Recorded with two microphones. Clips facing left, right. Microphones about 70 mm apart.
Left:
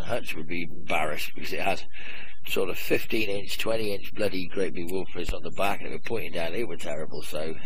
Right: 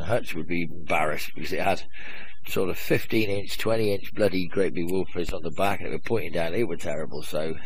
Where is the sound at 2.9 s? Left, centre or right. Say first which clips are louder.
Right 4 dB; right.